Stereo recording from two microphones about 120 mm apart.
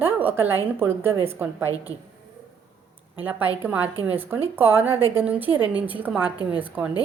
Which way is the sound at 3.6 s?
15° right (ahead or behind).